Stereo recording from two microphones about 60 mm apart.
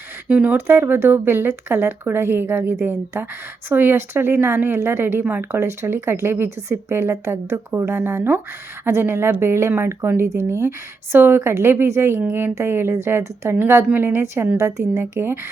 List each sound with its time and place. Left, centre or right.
0.3 s speech: right
0.5 s speech: right